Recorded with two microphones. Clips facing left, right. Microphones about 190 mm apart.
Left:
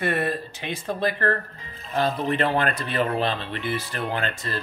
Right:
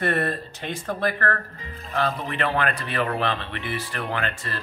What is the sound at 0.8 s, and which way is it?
Speech, 25° left (ahead or behind).